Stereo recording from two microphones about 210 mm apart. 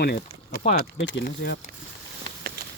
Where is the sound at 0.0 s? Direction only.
45° left (ahead or behind).